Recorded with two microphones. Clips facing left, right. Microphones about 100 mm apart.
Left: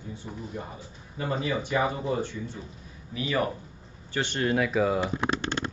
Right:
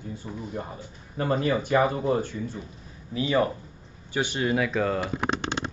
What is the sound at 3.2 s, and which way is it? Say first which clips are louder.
Speech: right 4 dB; 30° right (ahead or behind).